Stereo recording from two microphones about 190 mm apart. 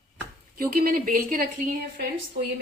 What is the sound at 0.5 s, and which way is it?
Speech, 50° right (ahead or behind).